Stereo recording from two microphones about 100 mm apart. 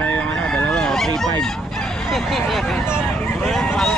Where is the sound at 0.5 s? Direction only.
10° left (ahead or behind).